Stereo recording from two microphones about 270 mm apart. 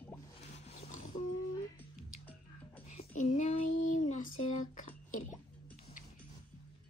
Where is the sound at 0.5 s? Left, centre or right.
Left.